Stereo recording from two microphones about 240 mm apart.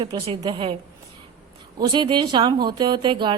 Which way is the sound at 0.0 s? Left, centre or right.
Centre.